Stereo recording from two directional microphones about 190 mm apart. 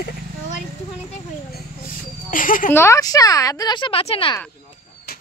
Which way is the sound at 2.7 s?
15° left (ahead or behind).